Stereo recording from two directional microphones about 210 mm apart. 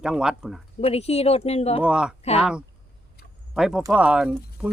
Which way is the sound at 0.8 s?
30° left (ahead or behind).